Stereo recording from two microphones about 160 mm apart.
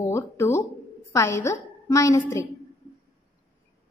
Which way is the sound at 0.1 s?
15° left (ahead or behind).